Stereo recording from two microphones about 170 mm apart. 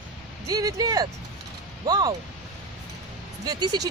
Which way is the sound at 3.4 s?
25° right (ahead or behind).